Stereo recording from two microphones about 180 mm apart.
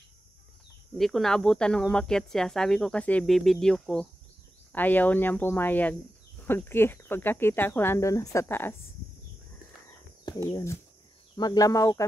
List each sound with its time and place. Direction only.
0.9 s speech: centre (ahead or behind)
9.8 s bird: 20° left (ahead or behind)
11.3 s speech: 20° left (ahead or behind)